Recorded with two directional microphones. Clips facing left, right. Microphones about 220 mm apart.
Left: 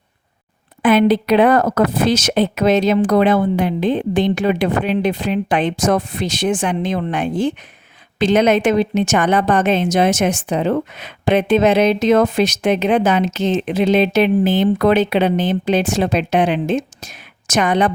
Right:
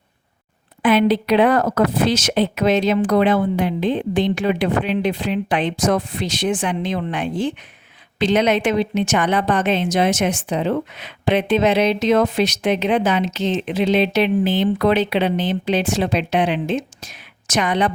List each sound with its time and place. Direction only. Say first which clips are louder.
0.8 s a woman's voice: left 3 dB; 45° left (ahead or behind)